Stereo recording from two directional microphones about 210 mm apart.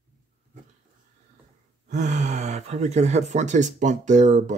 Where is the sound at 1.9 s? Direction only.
35° right (ahead or behind).